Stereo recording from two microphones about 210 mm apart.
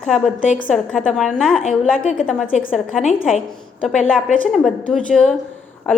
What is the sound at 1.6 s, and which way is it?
Speech, 40° left (ahead or behind).